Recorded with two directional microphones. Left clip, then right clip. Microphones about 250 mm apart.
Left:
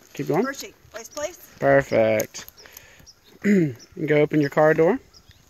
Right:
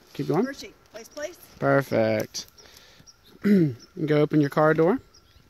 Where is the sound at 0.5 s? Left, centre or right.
Centre.